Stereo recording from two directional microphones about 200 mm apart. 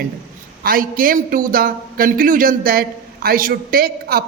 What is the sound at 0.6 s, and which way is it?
A man's voice, 45° right (ahead or behind).